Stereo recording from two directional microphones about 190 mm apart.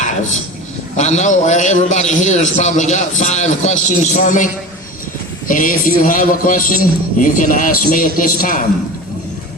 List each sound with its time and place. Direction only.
0.9 s a man's voice: 40° left (ahead or behind)
5.5 s a man's voice: 45° left (ahead or behind)